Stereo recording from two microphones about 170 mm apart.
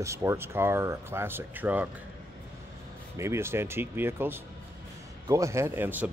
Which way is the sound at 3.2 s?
15° right (ahead or behind).